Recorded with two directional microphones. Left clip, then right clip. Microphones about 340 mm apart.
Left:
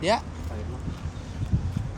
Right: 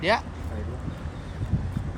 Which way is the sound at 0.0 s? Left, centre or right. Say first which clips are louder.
Right 1 dB; centre.